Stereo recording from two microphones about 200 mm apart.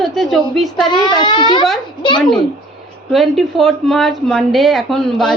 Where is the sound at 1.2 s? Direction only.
20° left (ahead or behind).